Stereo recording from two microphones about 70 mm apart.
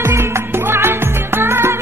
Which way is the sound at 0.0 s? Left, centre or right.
Right.